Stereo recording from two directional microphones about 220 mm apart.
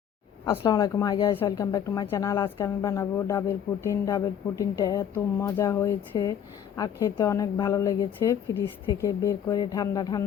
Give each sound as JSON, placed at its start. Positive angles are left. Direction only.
{"t": 0.5, "sound": "speech", "side_deg": 15}